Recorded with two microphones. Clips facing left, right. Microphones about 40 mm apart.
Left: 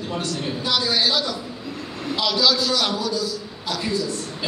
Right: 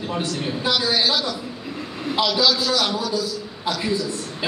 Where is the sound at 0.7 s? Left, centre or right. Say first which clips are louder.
Left 1 dB; centre.